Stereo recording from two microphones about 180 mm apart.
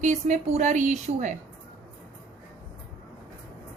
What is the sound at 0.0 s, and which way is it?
A woman's voice, 40° right (ahead or behind).